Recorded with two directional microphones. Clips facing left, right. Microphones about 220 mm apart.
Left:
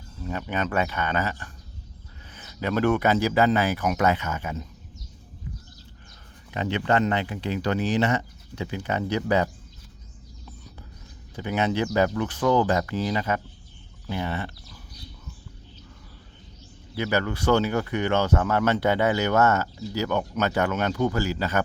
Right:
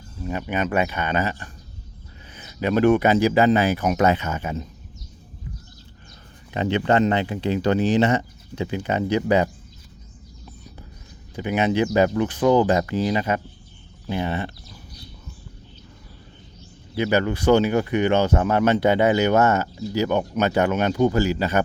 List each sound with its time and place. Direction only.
0.2 s speech: 15° right (ahead or behind)
6.5 s speech: 25° right (ahead or behind)
11.3 s speech: 15° right (ahead or behind)
16.9 s speech: 20° right (ahead or behind)